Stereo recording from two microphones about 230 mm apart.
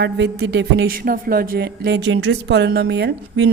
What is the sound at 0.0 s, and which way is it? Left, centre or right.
A woman's voice, right.